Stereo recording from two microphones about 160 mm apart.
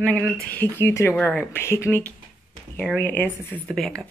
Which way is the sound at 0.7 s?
15° left (ahead or behind).